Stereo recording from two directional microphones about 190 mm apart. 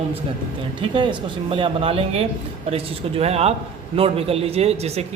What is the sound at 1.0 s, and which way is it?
A man's voice, 25° right (ahead or behind).